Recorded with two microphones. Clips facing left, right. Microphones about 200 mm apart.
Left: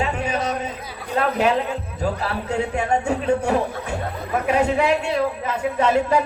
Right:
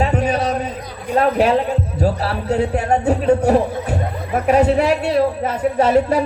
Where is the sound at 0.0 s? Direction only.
35° right (ahead or behind).